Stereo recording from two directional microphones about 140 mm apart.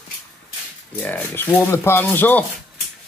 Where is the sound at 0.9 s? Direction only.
10° left (ahead or behind).